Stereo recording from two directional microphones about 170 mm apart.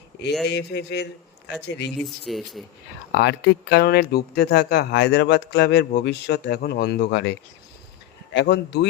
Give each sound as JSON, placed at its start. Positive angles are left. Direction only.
{"t": 0.4, "sound": "speech", "side_deg": 80}
{"t": 2.2, "sound": "speech", "side_deg": 0}
{"t": 3.1, "sound": "speech", "side_deg": 75}